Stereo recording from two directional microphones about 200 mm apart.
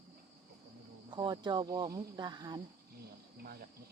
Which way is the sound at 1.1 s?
25° right (ahead or behind).